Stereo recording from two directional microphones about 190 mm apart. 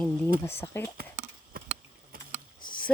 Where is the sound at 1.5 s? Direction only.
50° right (ahead or behind).